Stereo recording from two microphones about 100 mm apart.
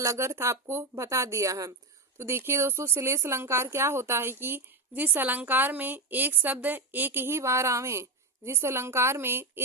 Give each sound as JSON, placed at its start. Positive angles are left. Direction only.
{"t": 0.0, "sound": "speech", "side_deg": -30}